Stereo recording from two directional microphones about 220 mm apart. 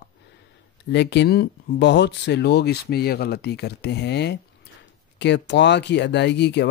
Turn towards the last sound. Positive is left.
turn(degrees=50)  # may be behind; listen again after turning